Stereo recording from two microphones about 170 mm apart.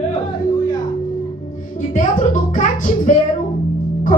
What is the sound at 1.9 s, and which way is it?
Speech, 45° left (ahead or behind).